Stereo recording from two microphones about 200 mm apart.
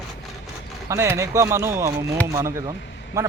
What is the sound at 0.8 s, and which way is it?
Speech, 15° right (ahead or behind).